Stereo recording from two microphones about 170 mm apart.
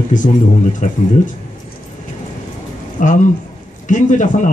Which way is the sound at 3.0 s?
50° left (ahead or behind).